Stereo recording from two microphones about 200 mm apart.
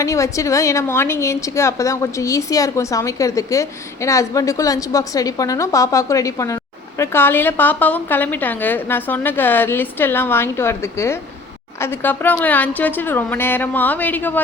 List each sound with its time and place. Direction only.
0.0 s a woman's voice: 15° left (ahead or behind)